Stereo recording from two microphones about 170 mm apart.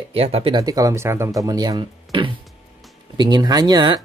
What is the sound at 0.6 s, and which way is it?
A man's voice, 20° right (ahead or behind).